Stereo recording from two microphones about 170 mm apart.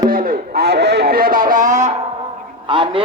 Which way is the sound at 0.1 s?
55° right (ahead or behind).